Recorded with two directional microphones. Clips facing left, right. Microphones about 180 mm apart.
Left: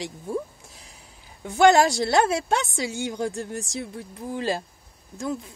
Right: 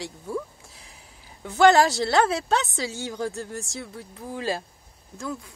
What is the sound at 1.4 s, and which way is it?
Speech, 15° left (ahead or behind).